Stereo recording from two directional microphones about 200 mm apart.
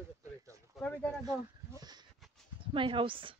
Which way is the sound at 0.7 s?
5° left (ahead or behind).